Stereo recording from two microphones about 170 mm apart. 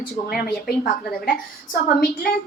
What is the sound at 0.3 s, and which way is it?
A woman's voice, 60° left (ahead or behind).